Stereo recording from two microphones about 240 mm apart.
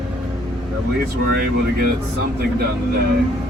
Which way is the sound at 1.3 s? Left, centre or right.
Right.